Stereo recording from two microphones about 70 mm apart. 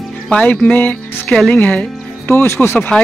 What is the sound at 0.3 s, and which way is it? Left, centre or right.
Speech, centre.